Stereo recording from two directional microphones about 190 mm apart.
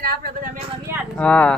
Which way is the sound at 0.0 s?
55° right (ahead or behind).